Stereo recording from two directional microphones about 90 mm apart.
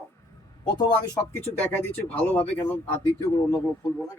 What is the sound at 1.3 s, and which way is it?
Speech, 20° left (ahead or behind).